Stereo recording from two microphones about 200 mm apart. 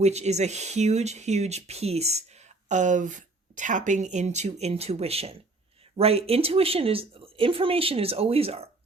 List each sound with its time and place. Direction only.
0.0 s a woman's voice: 35° right (ahead or behind)